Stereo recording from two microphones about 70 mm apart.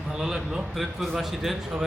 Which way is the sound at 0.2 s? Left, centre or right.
Centre.